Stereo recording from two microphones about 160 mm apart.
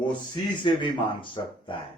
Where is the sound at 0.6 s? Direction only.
30° left (ahead or behind).